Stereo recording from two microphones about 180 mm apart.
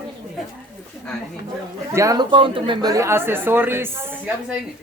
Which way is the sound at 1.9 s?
15° right (ahead or behind).